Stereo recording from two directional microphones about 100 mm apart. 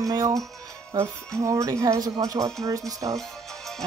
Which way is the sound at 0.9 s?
50° right (ahead or behind).